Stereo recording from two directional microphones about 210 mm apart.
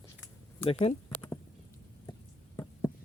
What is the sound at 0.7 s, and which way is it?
Speech, 30° left (ahead or behind).